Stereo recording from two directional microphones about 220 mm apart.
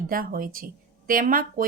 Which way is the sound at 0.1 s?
40° right (ahead or behind).